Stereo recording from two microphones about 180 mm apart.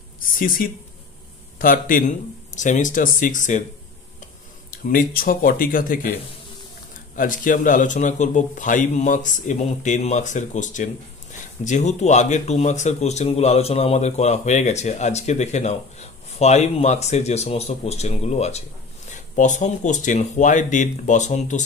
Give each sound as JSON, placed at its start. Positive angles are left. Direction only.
{"t": 0.2, "sound": "a man's voice", "side_deg": 50}
{"t": 4.6, "sound": "a man's voice", "side_deg": 50}
{"t": 7.2, "sound": "a man's voice", "side_deg": 50}